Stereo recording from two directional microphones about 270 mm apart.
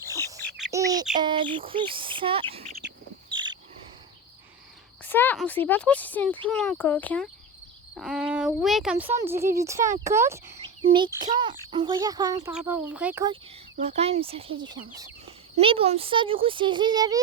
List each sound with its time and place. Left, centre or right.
0.7 s bird: centre
1.2 s speech: centre
3.3 s insect: centre
5.0 s speech: centre; by 14.5 s right
15.5 s speech: right